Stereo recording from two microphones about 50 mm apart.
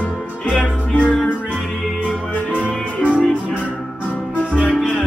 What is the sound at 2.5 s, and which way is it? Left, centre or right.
Music, left.